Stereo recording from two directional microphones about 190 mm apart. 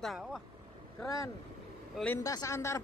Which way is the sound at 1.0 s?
15° left (ahead or behind).